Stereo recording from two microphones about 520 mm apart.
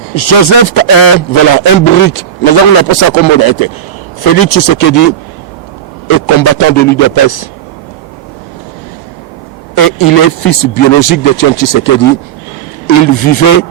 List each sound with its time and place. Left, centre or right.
0.1 s a man's voice: left
9.7 s speech: left
13.1 s speech: left